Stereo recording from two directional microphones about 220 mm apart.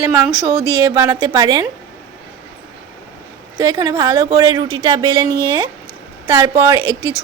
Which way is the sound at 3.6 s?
15° right (ahead or behind).